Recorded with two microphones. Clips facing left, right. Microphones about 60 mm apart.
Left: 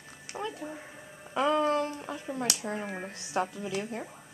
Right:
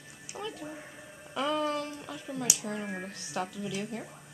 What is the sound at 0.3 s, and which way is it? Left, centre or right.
Music, left.